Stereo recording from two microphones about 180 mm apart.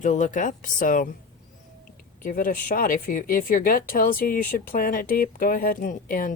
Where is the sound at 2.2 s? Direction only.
50° left (ahead or behind).